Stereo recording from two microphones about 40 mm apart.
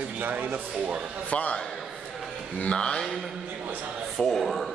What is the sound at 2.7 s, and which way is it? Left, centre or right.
Speech, left.